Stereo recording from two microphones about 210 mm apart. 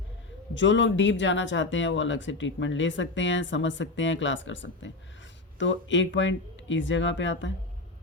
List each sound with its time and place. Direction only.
0.5 s speech: 60° left (ahead or behind)